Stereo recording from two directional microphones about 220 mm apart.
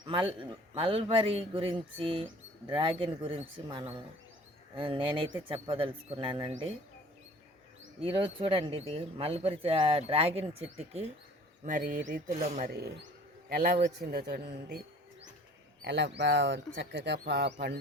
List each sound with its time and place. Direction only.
0.0 s speech: 25° right (ahead or behind)
4.7 s speech: 25° right (ahead or behind)
8.0 s speech: 25° right (ahead or behind); by 14.8 s 45° right (ahead or behind)
15.8 s speech: 50° right (ahead or behind)